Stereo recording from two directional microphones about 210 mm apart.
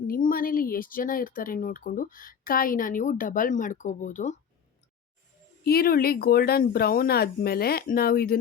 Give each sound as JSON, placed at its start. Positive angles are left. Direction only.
{"t": 0.1, "sound": "speech", "side_deg": 40}
{"t": 5.6, "sound": "speech", "side_deg": 45}